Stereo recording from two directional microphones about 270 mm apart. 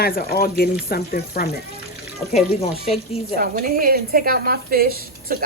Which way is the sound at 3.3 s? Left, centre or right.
Right.